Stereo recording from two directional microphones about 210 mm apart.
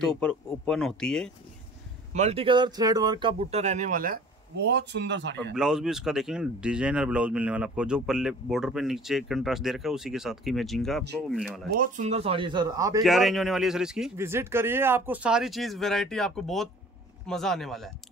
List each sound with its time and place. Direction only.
0.0 s speech: 5° left (ahead or behind)
2.1 s speech: 30° right (ahead or behind); by 5.5 s 55° right (ahead or behind)
5.5 s speech: 5° right (ahead or behind)
11.7 s speech: 40° right (ahead or behind); by 13.0 s 15° right (ahead or behind)
13.0 s speech: centre (ahead or behind)